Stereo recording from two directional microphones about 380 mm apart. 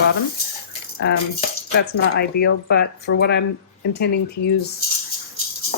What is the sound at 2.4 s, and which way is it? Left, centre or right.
Speech, left.